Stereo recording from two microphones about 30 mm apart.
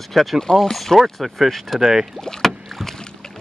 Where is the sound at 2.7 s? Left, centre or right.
Centre.